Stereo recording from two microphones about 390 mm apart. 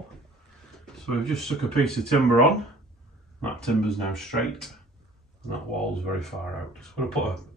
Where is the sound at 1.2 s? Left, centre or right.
Centre.